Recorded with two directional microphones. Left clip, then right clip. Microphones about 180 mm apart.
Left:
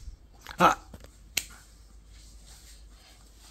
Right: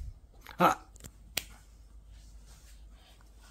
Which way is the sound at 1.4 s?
20° right (ahead or behind).